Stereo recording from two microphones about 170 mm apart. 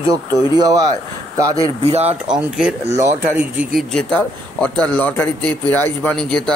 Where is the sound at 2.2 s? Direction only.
5° right (ahead or behind).